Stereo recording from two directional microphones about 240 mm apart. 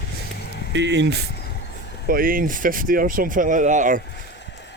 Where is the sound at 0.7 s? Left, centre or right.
Right.